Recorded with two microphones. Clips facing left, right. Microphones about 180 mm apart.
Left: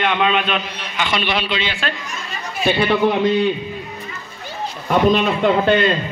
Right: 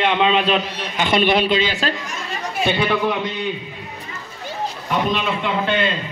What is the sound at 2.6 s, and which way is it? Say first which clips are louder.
Speech: left 3 dB; 5° left (ahead or behind).